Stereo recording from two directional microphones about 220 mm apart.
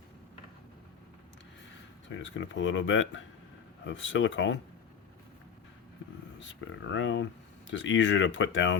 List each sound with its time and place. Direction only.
2.1 s speech: 55° left (ahead or behind)
6.4 s speech: 55° left (ahead or behind)